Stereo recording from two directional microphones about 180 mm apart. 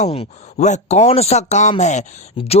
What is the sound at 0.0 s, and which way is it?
Speech, 35° left (ahead or behind).